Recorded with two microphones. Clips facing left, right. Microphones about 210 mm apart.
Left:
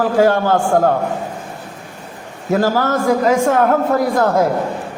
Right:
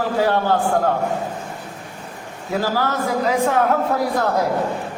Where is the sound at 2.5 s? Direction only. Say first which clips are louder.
Left 6 dB; 45° left (ahead or behind).